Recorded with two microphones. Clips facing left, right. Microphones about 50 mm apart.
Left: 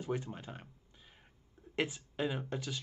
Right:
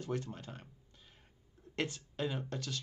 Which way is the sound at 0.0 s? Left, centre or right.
Centre.